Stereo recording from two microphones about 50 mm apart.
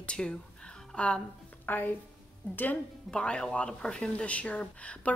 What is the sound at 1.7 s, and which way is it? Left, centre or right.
Speech, left.